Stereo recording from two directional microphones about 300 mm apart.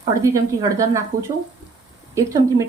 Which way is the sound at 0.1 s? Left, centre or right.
Centre.